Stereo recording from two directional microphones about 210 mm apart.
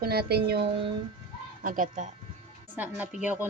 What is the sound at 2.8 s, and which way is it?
Speech, 10° right (ahead or behind).